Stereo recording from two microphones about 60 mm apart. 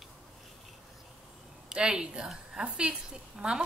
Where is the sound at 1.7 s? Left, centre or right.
Centre.